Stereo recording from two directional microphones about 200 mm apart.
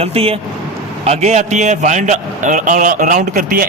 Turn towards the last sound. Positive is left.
turn(degrees=-45)  # may be behind; listen again after turning